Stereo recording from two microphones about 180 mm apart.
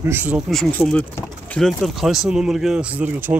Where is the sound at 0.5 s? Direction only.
5° left (ahead or behind).